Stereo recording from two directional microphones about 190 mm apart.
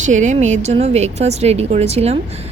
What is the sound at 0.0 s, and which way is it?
A woman's voice, 40° right (ahead or behind).